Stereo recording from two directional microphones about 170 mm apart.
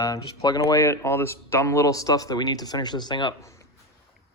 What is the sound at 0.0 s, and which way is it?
Speech, 20° left (ahead or behind).